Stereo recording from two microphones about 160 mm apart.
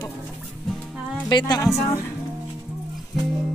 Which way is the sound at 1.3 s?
25° left (ahead or behind).